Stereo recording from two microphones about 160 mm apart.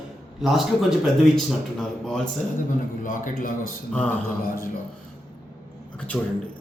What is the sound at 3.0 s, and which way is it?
Speech, 55° left (ahead or behind).